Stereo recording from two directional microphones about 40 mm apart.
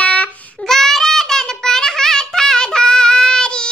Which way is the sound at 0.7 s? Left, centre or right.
Centre.